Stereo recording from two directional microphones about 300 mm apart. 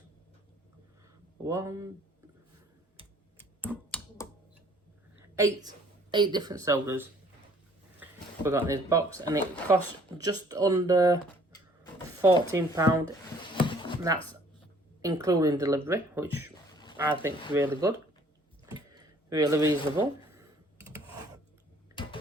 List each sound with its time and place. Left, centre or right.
1.5 s speech: centre
3.7 s finger snapping: centre
5.6 s speech: centre
8.4 s speech: centre
12.2 s speech: centre
13.4 s a sound: centre
15.0 s speech: centre
18.9 s a sound: centre